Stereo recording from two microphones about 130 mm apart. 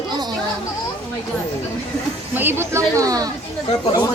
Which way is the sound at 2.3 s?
15° right (ahead or behind).